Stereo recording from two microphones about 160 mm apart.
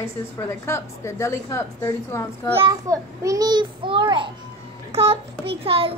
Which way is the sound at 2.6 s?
25° right (ahead or behind).